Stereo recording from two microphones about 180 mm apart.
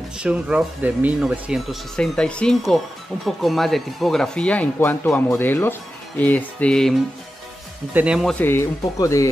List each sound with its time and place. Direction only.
0.2 s speech: 5° right (ahead or behind)
8.4 s speech: 15° left (ahead or behind)